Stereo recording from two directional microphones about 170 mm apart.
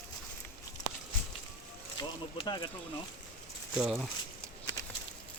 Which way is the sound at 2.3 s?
25° left (ahead or behind).